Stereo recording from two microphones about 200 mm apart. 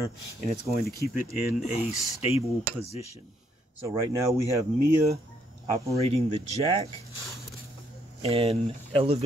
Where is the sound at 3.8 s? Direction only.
15° right (ahead or behind).